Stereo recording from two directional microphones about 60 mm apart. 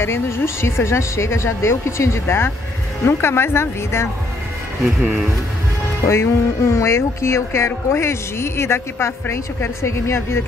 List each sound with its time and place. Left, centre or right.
0.0 s speech: left
6.0 s speech: left